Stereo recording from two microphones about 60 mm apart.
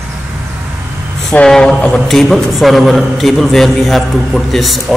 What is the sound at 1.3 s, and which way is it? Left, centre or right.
A man's voice, centre.